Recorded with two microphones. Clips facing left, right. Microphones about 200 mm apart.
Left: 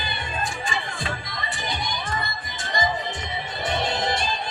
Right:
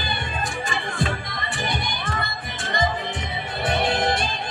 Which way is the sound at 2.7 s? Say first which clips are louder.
Right 1 dB; 60° right (ahead or behind).